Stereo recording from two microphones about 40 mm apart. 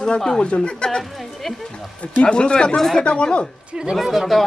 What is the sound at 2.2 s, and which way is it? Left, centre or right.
Speech, left.